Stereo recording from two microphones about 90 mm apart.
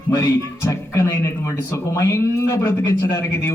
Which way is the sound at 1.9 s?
35° left (ahead or behind).